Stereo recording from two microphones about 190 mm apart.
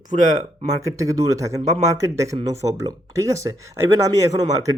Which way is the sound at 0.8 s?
15° right (ahead or behind).